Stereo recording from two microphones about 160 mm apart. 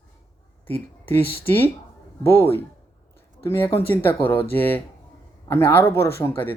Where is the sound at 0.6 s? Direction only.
10° left (ahead or behind).